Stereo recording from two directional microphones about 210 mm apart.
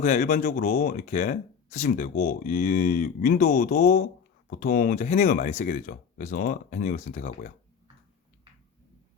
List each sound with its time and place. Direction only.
0.0 s speech: 40° left (ahead or behind)